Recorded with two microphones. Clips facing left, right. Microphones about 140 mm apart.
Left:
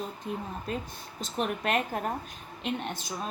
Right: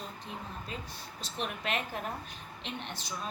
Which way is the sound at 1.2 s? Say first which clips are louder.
Left 7 dB; 45° left (ahead or behind).